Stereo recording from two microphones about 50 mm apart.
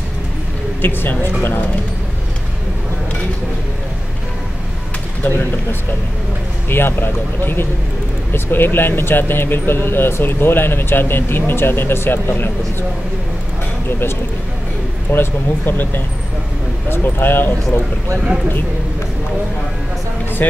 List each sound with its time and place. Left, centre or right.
0.8 s speech: left
5.2 s speech: left
15.0 s speech: left